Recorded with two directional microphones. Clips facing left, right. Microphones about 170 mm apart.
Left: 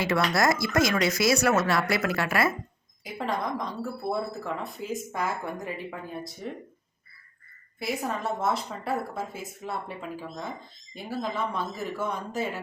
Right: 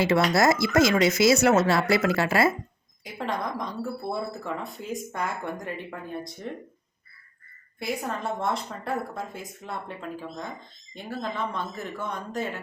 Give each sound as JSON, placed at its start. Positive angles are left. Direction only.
{"t": 0.0, "sound": "speech", "side_deg": -25}
{"t": 3.0, "sound": "a woman's voice", "side_deg": 0}
{"t": 7.8, "sound": "a woman's voice", "side_deg": 0}